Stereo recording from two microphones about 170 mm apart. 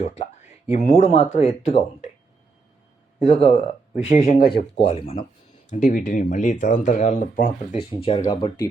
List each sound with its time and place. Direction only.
0.0 s speech: 40° left (ahead or behind)
3.2 s speech: 35° left (ahead or behind)
4.0 s speech: 50° left (ahead or behind)
4.9 s speech: 35° left (ahead or behind)
5.7 s speech: 50° left (ahead or behind)
7.9 s speech: 35° left (ahead or behind)